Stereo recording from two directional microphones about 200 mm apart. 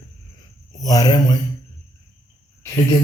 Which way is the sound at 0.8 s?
20° left (ahead or behind).